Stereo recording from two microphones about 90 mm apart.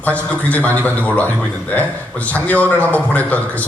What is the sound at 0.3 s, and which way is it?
A man's voice, 15° left (ahead or behind).